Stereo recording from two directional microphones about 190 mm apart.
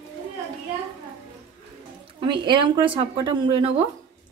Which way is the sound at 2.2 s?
25° right (ahead or behind).